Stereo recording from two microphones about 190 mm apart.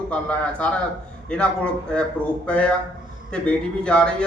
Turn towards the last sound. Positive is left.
turn(degrees=5)  # may be behind; listen again after turning